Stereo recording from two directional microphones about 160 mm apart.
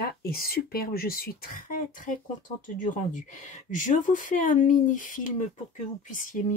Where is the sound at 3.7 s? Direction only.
55° left (ahead or behind).